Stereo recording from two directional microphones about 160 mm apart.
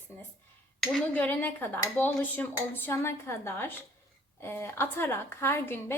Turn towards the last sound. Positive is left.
turn(degrees=15)  # may be behind; listen again after turning